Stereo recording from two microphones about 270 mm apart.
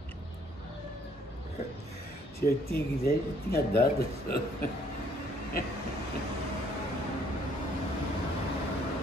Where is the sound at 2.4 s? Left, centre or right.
Left.